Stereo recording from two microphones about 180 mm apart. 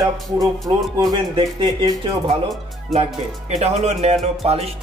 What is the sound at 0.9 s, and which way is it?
Speech, 25° right (ahead or behind).